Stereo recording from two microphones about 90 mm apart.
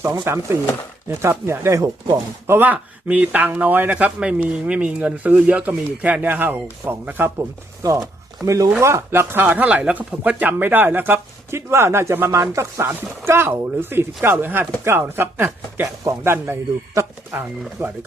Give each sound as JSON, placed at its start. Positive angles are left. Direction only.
{"t": 0.0, "sound": "speech", "side_deg": -30}
{"t": 2.5, "sound": "a man's voice", "side_deg": -20}
{"t": 7.8, "sound": "speech", "side_deg": -40}